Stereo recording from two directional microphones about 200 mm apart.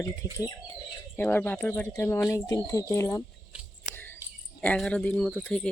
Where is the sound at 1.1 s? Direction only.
10° left (ahead or behind).